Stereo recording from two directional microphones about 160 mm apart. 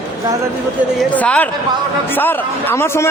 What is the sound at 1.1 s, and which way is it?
A man's voice, 10° left (ahead or behind).